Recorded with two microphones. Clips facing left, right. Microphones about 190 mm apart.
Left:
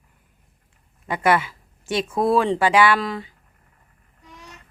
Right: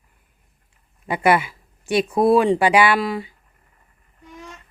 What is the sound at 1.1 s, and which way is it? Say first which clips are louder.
Speech: right 2 dB; 10° right (ahead or behind).